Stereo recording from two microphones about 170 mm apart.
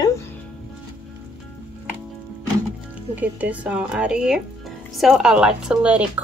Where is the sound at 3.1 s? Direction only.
10° right (ahead or behind).